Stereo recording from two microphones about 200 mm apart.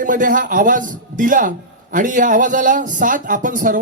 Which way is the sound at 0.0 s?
40° right (ahead or behind).